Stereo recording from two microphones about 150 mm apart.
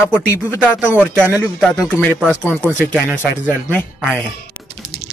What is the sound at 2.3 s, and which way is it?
Speech, 10° left (ahead or behind).